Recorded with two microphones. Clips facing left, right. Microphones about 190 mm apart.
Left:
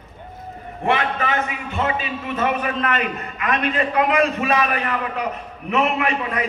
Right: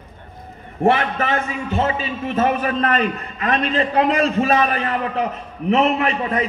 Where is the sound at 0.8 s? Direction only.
40° right (ahead or behind).